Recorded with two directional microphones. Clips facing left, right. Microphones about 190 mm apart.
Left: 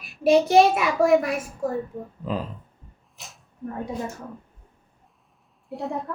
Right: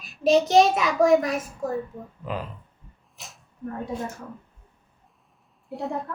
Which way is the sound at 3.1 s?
Centre (ahead or behind).